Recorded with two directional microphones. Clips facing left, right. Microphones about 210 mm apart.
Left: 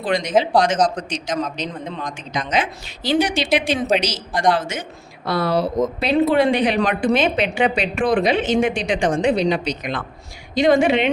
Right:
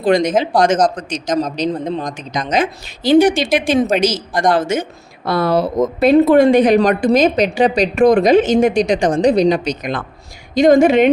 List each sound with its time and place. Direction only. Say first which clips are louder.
0.0 s a man's voice: right 5 dB; 45° right (ahead or behind)